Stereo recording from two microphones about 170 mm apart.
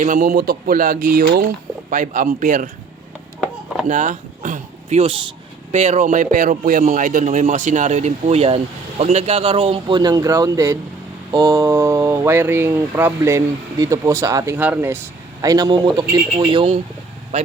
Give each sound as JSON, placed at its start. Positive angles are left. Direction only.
{"t": 0.0, "sound": "speech", "side_deg": -50}
{"t": 3.4, "sound": "chop", "side_deg": 0}
{"t": 3.8, "sound": "a man's voice", "side_deg": -45}
{"t": 17.3, "sound": "vehicle", "side_deg": -40}